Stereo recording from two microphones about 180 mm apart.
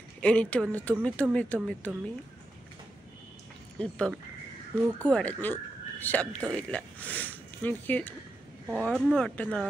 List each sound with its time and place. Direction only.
0.2 s speech: 5° left (ahead or behind)
3.7 s speech: 5° left (ahead or behind)